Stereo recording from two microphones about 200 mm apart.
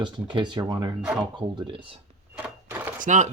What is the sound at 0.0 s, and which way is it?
Speech, 25° right (ahead or behind).